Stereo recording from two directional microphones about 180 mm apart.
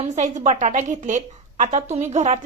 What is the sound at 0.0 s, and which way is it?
A woman's voice, 40° right (ahead or behind).